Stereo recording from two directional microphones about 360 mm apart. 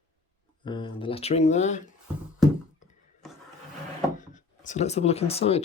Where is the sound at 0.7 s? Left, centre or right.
Centre.